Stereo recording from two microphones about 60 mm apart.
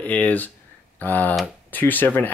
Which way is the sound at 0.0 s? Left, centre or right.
Left.